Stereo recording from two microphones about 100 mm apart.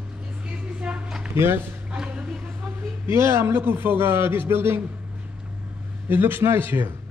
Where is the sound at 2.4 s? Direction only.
25° right (ahead or behind).